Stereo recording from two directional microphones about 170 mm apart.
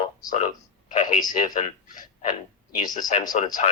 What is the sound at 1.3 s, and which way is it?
Speech, 50° left (ahead or behind).